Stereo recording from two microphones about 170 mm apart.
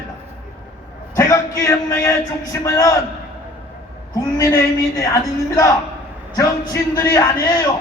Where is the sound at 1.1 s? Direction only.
20° left (ahead or behind).